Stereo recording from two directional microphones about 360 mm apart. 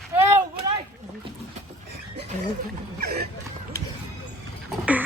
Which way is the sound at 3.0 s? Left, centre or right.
Right.